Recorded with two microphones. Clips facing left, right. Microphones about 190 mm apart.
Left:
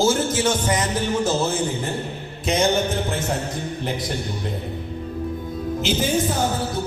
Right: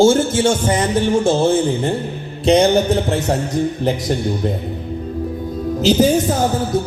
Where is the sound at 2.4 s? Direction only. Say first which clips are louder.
Right 8 dB; 35° right (ahead or behind).